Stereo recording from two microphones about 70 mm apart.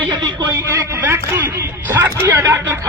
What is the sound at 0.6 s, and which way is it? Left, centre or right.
A man's voice, right.